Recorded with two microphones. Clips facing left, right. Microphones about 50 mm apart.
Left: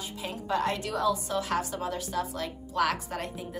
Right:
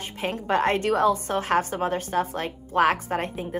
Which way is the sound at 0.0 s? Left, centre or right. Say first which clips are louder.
Right 7 dB; right.